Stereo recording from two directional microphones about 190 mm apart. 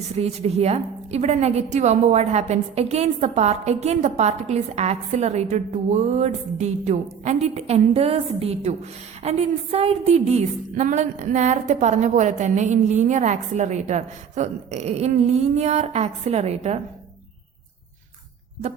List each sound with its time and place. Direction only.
0.2 s a woman's voice: 35° right (ahead or behind)